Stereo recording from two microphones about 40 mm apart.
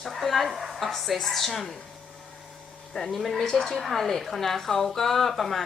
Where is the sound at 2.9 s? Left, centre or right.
Centre.